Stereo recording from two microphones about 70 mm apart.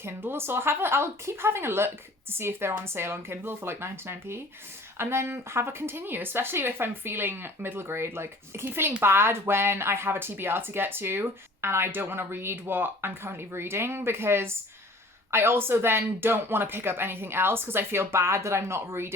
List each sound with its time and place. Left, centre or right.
0.0 s speech: right